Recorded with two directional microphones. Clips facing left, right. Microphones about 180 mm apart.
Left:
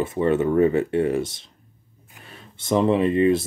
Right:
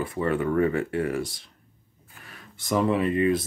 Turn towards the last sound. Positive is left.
turn(degrees=25)  # may be behind; listen again after turning